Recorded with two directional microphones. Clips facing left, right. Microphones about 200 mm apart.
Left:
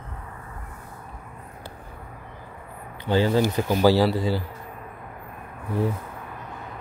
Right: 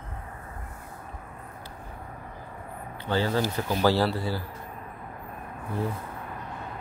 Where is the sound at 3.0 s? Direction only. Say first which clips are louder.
Left 5 dB; 15° left (ahead or behind).